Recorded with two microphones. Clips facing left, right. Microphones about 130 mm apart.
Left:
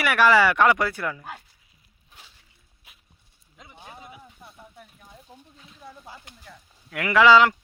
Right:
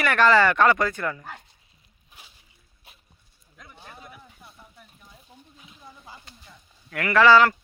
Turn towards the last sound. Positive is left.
turn(degrees=15)  # may be behind; listen again after turning